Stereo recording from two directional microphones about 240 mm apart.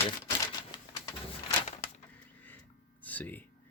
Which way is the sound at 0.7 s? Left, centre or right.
Centre.